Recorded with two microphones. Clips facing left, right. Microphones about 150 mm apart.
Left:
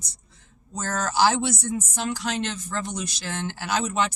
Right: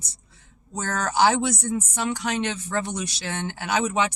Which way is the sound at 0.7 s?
60° right (ahead or behind).